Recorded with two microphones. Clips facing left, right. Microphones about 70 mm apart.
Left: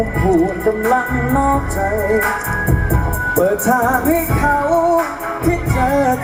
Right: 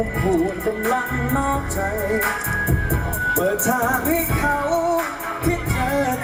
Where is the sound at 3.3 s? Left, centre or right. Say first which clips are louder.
Left 7 dB; centre.